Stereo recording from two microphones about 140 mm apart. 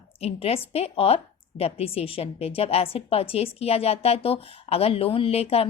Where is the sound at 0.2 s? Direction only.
45° left (ahead or behind).